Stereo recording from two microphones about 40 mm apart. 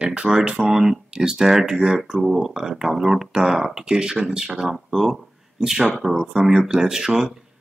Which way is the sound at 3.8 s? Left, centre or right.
Right.